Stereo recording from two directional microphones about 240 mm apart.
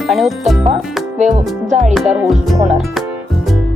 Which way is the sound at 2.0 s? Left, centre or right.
Centre.